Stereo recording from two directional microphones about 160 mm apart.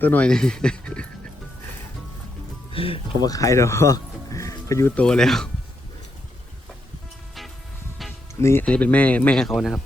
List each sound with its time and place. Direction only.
0.0 s speech: 10° left (ahead or behind)
2.7 s speech: 35° left (ahead or behind)
3.2 s speech: 20° left (ahead or behind)
4.9 s speech: 5° left (ahead or behind)
8.4 s speech: 15° left (ahead or behind); by 9.8 s centre (ahead or behind)